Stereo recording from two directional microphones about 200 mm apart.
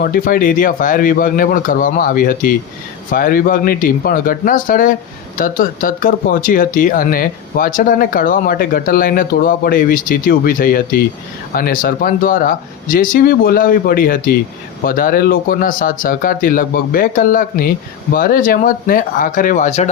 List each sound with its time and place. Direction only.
0.0 s speech: 45° left (ahead or behind)